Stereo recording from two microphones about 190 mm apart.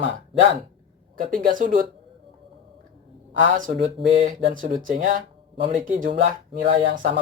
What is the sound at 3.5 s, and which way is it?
Speech, 40° right (ahead or behind).